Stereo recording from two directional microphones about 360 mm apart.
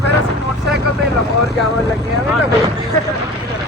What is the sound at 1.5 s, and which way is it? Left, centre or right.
Speech, right.